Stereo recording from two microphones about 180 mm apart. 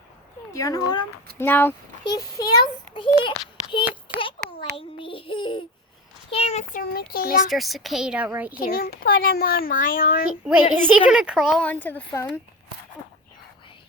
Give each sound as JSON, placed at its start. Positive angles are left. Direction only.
{"t": 0.5, "sound": "speech", "side_deg": 20}
{"t": 1.4, "sound": "a woman's voice", "side_deg": 10}
{"t": 4.1, "sound": "a sound", "side_deg": 25}
{"t": 4.9, "sound": "a child's voice", "side_deg": 30}
{"t": 6.9, "sound": "a child's voice", "side_deg": 55}
{"t": 7.5, "sound": "a woman's voice", "side_deg": 0}
{"t": 8.5, "sound": "a child's voice", "side_deg": 55}
{"t": 10.4, "sound": "a woman's voice", "side_deg": -10}
{"t": 11.6, "sound": "a woman's voice", "side_deg": 10}